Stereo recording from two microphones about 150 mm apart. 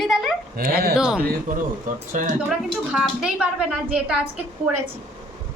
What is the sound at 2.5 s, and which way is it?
A woman's voice, centre (ahead or behind).